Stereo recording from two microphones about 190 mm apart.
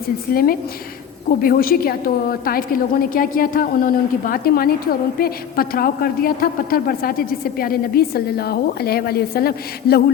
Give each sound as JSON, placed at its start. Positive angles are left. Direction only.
{"t": 0.3, "sound": "a woman's voice", "side_deg": 50}